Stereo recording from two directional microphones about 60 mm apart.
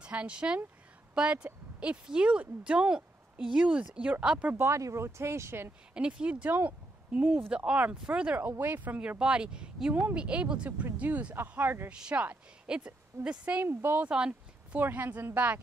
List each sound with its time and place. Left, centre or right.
0.0 s a woman's voice: centre
4.6 s speech: right
5.9 s a woman's voice: centre
8.4 s a woman's voice: right
11.9 s a woman's voice: centre
13.7 s speech: right
14.0 s speech: centre
14.8 s a woman's voice: right